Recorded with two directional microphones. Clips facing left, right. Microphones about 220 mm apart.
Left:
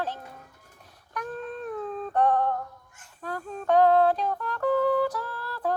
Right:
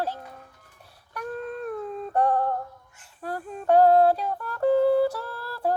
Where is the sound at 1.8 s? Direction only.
10° right (ahead or behind).